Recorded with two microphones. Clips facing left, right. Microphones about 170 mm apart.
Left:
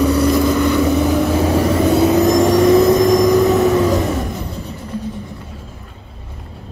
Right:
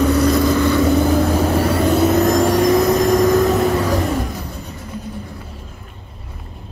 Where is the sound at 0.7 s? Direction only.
Centre (ahead or behind); by 4.1 s 20° left (ahead or behind).